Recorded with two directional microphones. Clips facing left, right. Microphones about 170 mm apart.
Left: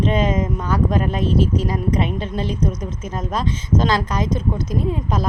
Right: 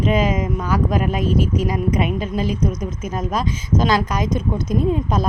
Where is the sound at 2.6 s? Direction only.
35° left (ahead or behind).